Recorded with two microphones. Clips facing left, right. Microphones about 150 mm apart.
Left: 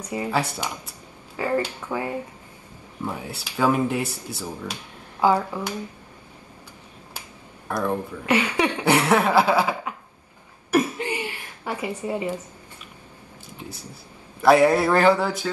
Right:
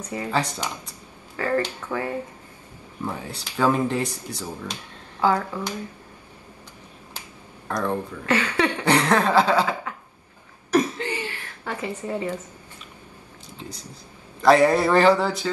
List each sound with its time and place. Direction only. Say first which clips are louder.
0.0 s speech: left 1 dB; 10° left (ahead or behind)
7.2 s speech: even; 10° left (ahead or behind)
10.7 s a sound: even; 10° left (ahead or behind)
14.4 s speech: even; 5° left (ahead or behind)